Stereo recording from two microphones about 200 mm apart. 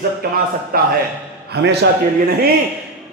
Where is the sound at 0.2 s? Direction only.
50° right (ahead or behind).